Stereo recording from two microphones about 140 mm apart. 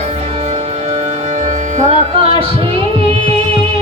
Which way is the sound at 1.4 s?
55° right (ahead or behind).